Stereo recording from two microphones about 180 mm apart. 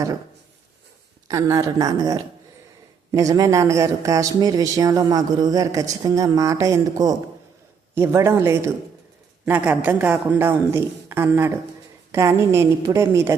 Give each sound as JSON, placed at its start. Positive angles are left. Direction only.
{"t": 1.3, "sound": "a woman's voice", "side_deg": -15}